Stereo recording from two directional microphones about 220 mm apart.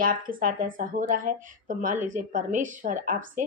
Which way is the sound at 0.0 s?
40° right (ahead or behind).